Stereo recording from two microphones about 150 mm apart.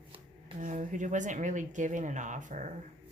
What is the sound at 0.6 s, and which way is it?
Speech, 55° right (ahead or behind).